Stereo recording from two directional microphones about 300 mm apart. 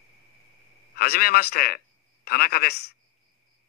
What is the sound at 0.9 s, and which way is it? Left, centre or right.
A woman's voice, left.